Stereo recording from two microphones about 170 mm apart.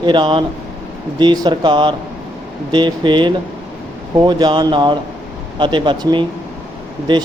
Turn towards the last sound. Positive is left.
turn(degrees=-25)  # may be behind; listen again after turning